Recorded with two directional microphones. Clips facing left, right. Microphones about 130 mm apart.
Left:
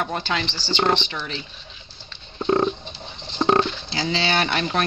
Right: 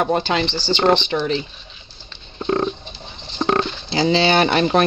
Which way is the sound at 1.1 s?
35° right (ahead or behind).